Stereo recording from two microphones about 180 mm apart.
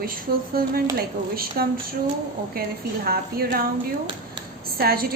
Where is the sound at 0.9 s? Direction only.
55° right (ahead or behind).